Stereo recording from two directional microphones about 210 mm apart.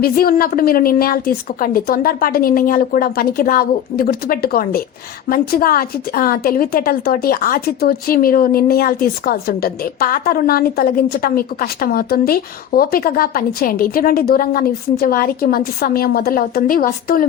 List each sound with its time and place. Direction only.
0.0 s a woman's voice: 45° left (ahead or behind)